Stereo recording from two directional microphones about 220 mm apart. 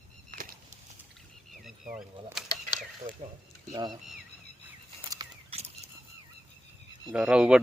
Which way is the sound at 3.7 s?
20° right (ahead or behind).